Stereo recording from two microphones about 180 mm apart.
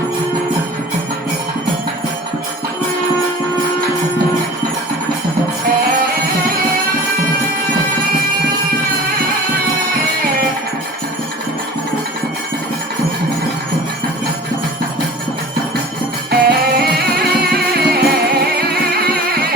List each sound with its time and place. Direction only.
16.3 s music: 60° right (ahead or behind)